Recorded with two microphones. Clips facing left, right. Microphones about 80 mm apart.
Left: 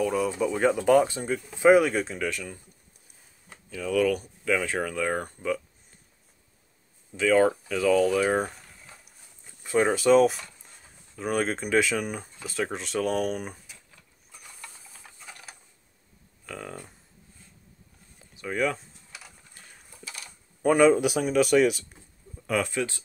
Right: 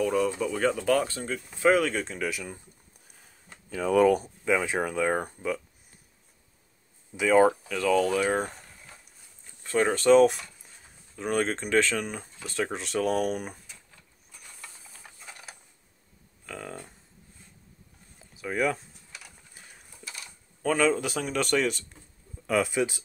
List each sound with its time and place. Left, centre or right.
0.0 s speech: centre
3.7 s speech: right
4.5 s speech: centre
7.2 s speech: centre
7.6 s a sound: centre
9.6 s speech: centre
14.9 s tick-tock: centre
16.4 s speech: centre
18.2 s a sound: centre
20.6 s speech: centre
22.5 s speech: centre